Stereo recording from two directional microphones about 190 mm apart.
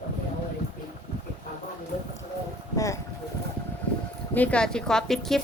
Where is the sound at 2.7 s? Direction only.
15° left (ahead or behind).